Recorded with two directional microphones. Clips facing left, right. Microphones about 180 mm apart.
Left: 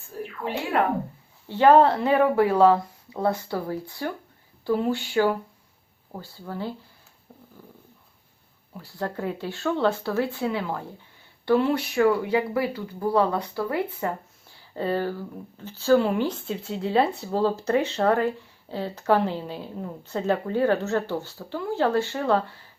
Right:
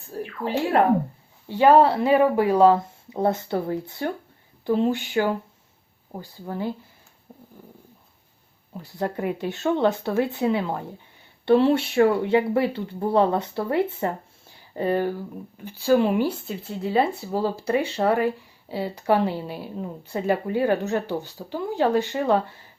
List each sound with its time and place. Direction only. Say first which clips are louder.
1.5 s speech: right 1 dB; 10° right (ahead or behind)
8.7 s speech: right 3 dB; 20° right (ahead or behind)